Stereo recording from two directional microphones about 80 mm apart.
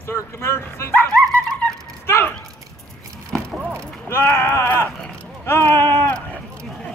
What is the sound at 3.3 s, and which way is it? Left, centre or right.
Vehicle, centre.